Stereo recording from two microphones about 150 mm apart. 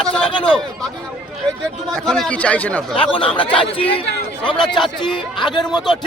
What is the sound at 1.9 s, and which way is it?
Speech, 5° left (ahead or behind).